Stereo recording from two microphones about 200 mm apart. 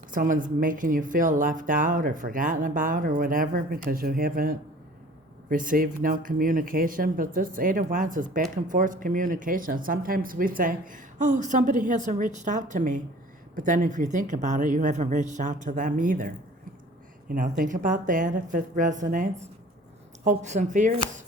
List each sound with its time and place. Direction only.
0.1 s speech: 40° right (ahead or behind)